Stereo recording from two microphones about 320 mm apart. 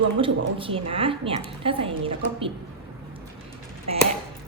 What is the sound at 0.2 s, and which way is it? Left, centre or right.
Speech, centre.